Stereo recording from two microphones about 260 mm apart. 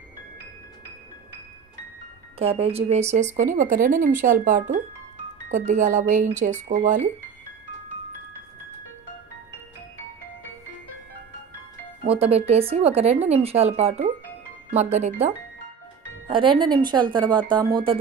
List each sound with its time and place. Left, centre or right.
2.3 s speech: right
12.0 s speech: right
16.3 s speech: centre